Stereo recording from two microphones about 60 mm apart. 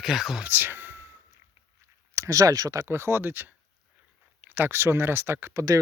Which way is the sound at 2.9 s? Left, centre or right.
Right.